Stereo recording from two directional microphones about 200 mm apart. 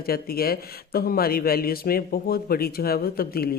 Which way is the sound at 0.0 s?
50° left (ahead or behind).